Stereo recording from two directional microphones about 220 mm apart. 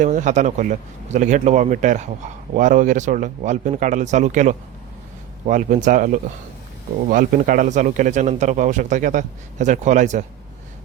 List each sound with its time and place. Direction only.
0.0 s speech: 35° right (ahead or behind)